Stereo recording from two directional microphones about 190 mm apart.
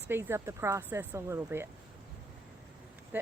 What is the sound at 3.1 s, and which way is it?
Speech, 10° right (ahead or behind).